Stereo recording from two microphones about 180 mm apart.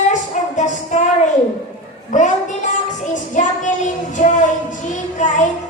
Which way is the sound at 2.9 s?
45° left (ahead or behind).